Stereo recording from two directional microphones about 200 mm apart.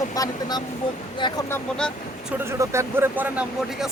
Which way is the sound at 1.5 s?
10° left (ahead or behind).